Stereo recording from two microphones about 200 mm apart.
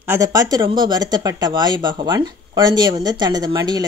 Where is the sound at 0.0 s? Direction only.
15° right (ahead or behind).